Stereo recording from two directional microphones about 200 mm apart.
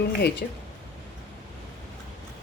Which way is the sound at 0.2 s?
55° left (ahead or behind).